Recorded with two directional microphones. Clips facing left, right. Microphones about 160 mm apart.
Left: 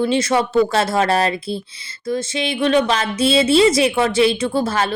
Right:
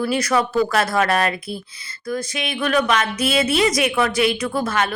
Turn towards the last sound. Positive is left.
turn(degrees=30)  # may be behind; listen again after turning